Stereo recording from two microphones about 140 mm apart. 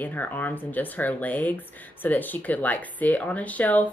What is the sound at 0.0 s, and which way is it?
Speech, 15° left (ahead or behind).